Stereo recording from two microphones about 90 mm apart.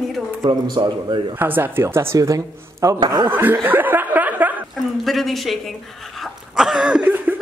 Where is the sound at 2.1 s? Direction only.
40° right (ahead or behind).